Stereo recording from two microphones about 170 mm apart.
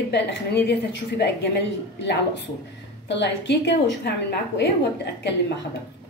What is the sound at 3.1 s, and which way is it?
A woman's voice, 90° left.